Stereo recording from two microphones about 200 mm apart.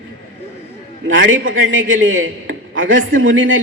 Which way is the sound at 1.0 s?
75° right (ahead or behind).